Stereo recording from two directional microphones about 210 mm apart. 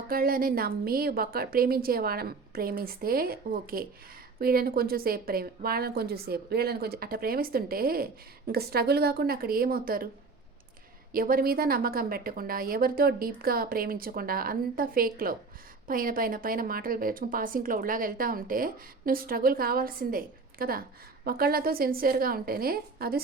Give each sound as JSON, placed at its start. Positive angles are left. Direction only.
{"t": 0.1, "sound": "a woman's voice", "side_deg": -45}
{"t": 11.1, "sound": "a woman's voice", "side_deg": -45}